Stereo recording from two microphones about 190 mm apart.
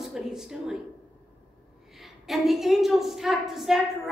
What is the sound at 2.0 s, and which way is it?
A woman's voice, centre (ahead or behind).